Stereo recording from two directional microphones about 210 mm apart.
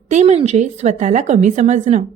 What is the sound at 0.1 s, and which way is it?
A woman's voice, 30° right (ahead or behind).